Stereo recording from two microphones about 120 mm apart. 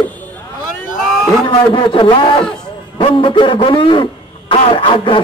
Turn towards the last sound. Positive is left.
turn(degrees=45)  # may be behind; listen again after turning